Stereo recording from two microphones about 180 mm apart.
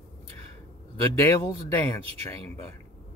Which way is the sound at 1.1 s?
15° left (ahead or behind).